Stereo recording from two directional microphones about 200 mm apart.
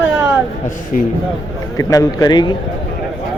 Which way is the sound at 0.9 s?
45° left (ahead or behind).